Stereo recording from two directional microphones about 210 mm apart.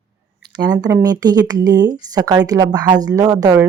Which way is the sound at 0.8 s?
15° right (ahead or behind).